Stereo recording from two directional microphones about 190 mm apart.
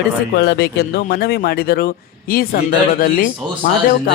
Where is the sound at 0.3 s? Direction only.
60° left (ahead or behind).